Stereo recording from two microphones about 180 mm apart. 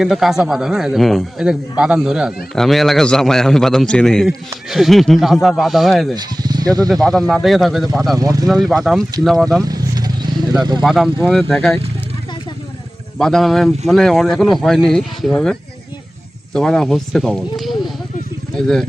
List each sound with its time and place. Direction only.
0.0 s speech: centre (ahead or behind)
6.1 s speech: 20° right (ahead or behind)
6.8 s speech: centre (ahead or behind)
8.1 s speech: 20° right (ahead or behind)
8.4 s speech: centre (ahead or behind)
9.6 s vehicle: 20° right (ahead or behind)
10.8 s speech: centre (ahead or behind)
13.1 s speech: centre (ahead or behind)
16.6 s speech: 5° left (ahead or behind)